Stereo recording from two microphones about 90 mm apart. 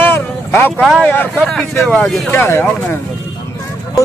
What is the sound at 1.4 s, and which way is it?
Speech, 5° left (ahead or behind).